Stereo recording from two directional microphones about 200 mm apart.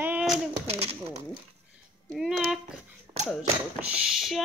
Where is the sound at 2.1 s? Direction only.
Centre (ahead or behind).